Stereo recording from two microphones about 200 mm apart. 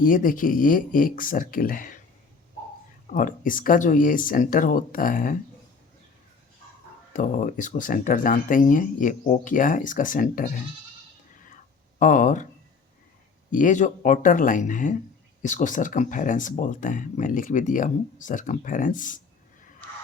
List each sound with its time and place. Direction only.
0.0 s speech: 45° left (ahead or behind)
3.1 s speech: 40° left (ahead or behind)
7.1 s speech: 40° left (ahead or behind)
11.9 s speech: 40° left (ahead or behind)
13.5 s speech: 40° left (ahead or behind)